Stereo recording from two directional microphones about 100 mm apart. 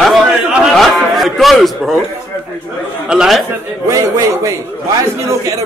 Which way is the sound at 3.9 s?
35° right (ahead or behind).